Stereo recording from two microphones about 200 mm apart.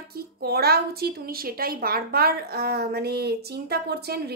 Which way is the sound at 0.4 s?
50° right (ahead or behind).